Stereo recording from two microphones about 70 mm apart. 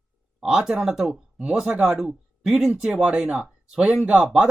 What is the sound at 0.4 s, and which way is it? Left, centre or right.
Speech, centre.